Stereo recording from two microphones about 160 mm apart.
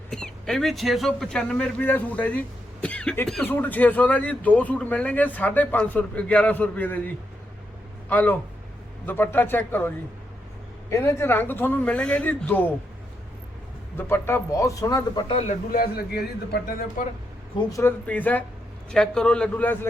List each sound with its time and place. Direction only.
0.1 s speech: 5° left (ahead or behind)
8.1 s speech: 10° left (ahead or behind)
13.9 s a man's voice: 15° left (ahead or behind)
15.3 s speech: 40° left (ahead or behind)
15.7 s a man's voice: 70° left (ahead or behind)
17.0 s speech: 55° left (ahead or behind)
17.7 s a man's voice: 20° left (ahead or behind)
18.0 s speech: 10° left (ahead or behind)